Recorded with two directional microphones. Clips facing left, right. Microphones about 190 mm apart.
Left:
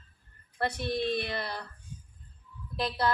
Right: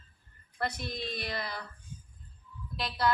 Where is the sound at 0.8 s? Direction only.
60° left (ahead or behind).